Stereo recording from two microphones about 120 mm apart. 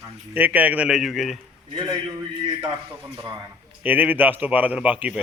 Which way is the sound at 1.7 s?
35° right (ahead or behind).